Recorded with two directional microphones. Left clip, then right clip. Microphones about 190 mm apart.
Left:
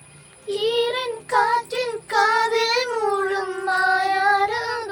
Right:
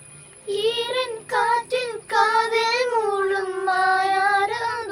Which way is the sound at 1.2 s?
20° left (ahead or behind).